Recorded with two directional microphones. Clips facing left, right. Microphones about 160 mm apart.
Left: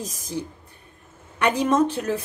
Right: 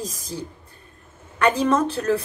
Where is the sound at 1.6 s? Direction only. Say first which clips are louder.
Even; 15° left (ahead or behind).